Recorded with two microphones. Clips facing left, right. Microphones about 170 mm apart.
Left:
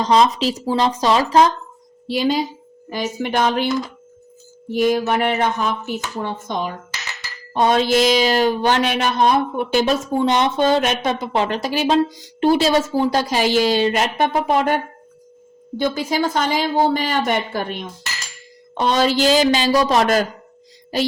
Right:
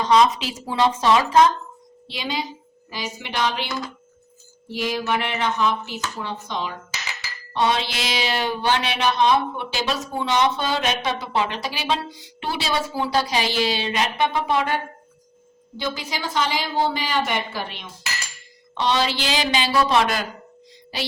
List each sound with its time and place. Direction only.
0.0 s speech: 35° left (ahead or behind)
4.7 s speech: 50° left (ahead or behind)
15.8 s speech: 50° left (ahead or behind)